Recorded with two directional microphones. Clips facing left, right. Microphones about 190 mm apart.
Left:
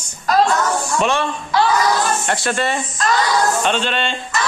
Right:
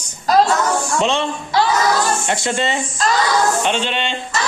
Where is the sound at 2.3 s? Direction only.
20° right (ahead or behind).